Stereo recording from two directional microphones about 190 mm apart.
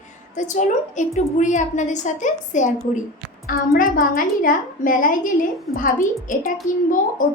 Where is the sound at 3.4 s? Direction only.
50° left (ahead or behind).